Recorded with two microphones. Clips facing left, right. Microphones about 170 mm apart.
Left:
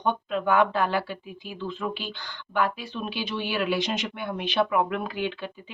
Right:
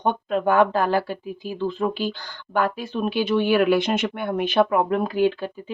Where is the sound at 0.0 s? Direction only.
45° right (ahead or behind).